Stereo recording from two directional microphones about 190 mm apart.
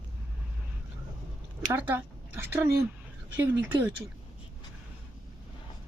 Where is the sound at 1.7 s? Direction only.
10° right (ahead or behind).